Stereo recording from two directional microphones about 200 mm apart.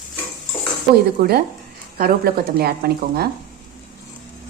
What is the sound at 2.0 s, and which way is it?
A woman's voice, 50° right (ahead or behind).